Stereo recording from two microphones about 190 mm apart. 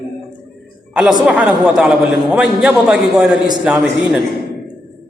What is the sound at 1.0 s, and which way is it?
A man's voice, 5° right (ahead or behind).